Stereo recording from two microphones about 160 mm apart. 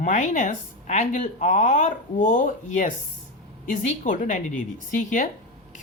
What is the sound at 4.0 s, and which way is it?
Speech, 50° left (ahead or behind).